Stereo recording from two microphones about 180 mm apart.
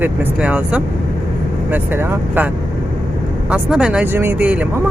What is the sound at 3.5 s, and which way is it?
Speech, 5° right (ahead or behind).